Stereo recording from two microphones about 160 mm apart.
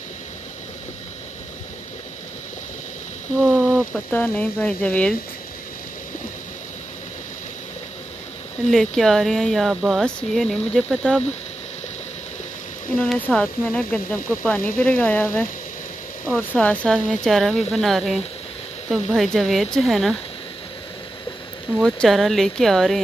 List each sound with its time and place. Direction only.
3.3 s speech: 5° right (ahead or behind)
4.1 s speech: 10° left (ahead or behind)
8.6 s speech: centre (ahead or behind)
12.9 s speech: 5° left (ahead or behind)
21.7 s speech: 5° left (ahead or behind)